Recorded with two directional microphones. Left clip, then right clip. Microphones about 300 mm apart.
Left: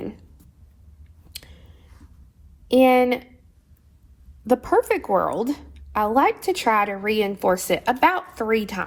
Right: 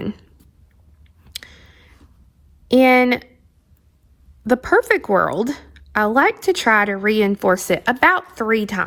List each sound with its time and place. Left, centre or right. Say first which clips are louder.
2.9 s a woman's voice: right 3 dB; right
4.4 s a woman's voice: right 3 dB; right